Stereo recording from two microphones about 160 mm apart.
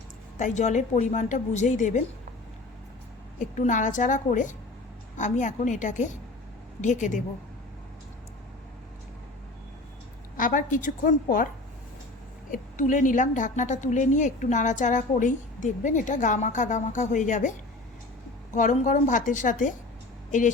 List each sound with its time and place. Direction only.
0.3 s a woman's voice: 50° left (ahead or behind)
3.3 s a woman's voice: 50° left (ahead or behind)
10.3 s a woman's voice: 55° left (ahead or behind)
12.5 s a woman's voice: 55° left (ahead or behind)
18.5 s a woman's voice: 50° left (ahead or behind)